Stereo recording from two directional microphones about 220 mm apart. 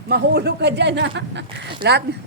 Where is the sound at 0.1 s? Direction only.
50° right (ahead or behind).